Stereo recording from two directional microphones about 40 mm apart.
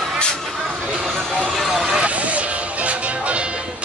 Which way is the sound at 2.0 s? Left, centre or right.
Right.